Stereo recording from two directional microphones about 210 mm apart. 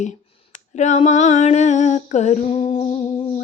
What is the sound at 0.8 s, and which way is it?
Female singing, 35° left (ahead or behind).